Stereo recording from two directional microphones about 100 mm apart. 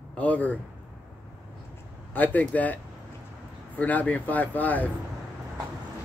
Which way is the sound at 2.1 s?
15° left (ahead or behind).